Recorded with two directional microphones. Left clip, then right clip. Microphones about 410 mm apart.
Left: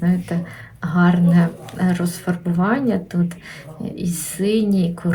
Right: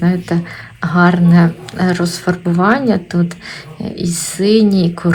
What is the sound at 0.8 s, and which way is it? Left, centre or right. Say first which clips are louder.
Speech: right 7 dB; centre.